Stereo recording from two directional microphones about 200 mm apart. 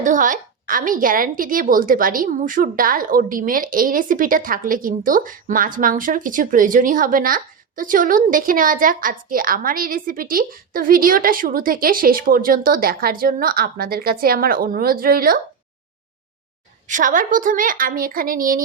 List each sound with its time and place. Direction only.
0.0 s a woman's voice: 40° right (ahead or behind)
16.8 s a woman's voice: 40° right (ahead or behind)